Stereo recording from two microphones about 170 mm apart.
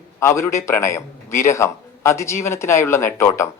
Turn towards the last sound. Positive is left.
turn(degrees=15)  # may be behind; listen again after turning